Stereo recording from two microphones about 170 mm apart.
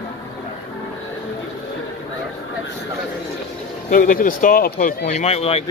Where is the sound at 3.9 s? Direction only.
55° left (ahead or behind).